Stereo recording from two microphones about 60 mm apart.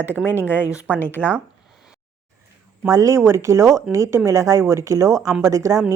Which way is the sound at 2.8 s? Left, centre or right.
Right.